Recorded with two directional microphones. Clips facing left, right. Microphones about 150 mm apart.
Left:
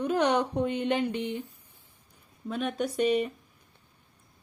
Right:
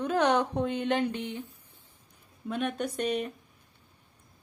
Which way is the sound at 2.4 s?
Centre (ahead or behind).